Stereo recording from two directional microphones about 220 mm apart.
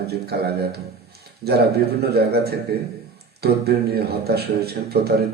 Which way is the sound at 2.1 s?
45° right (ahead or behind).